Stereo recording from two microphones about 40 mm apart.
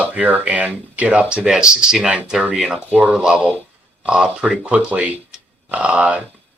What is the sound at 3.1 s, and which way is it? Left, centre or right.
Speech, right.